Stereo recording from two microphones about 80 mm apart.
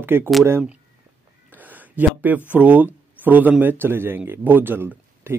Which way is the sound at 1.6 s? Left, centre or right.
Right.